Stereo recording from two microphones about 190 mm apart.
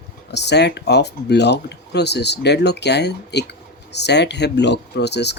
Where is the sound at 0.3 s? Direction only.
65° left (ahead or behind).